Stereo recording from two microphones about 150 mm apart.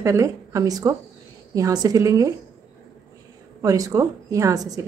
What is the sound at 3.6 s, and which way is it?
A woman's voice, 25° right (ahead or behind).